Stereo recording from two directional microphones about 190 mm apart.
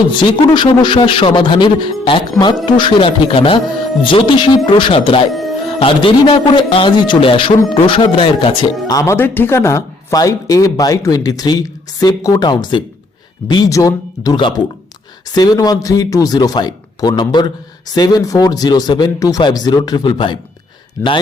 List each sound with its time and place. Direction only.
0.5 s speech: 25° left (ahead or behind)
5.3 s music: centre (ahead or behind)
5.6 s speech: 30° left (ahead or behind)
9.0 s speech: 15° left (ahead or behind)